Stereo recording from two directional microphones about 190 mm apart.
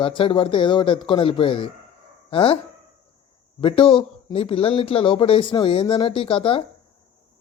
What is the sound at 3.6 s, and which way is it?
Speech, 25° left (ahead or behind).